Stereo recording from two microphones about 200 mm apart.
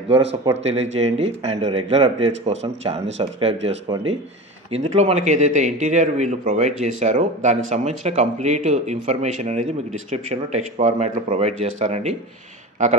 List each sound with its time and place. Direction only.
0.5 s a man's voice: 35° right (ahead or behind)